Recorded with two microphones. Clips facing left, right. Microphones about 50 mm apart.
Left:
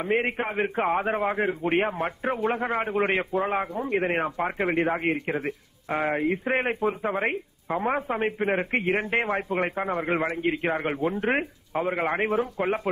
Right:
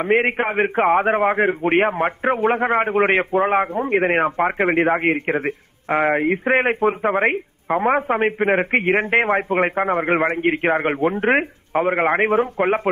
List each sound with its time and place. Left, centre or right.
0.1 s a man's voice: right